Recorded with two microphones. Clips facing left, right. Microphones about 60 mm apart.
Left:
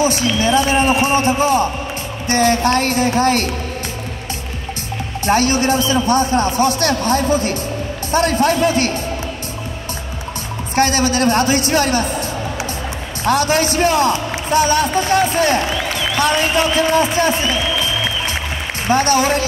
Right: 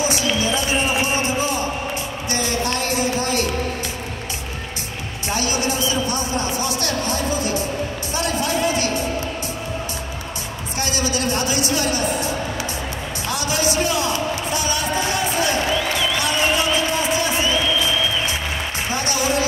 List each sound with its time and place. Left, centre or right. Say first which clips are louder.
0.0 s a man's voice: left 5 dB; left
5.2 s a man's voice: left 8 dB; left
10.8 s a man's voice: left 8 dB; left
13.2 s a man's voice: left 8 dB; left
18.9 s a man's voice: left 9 dB; left